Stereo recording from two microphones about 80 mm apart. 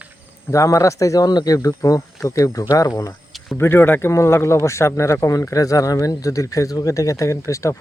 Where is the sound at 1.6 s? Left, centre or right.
Left.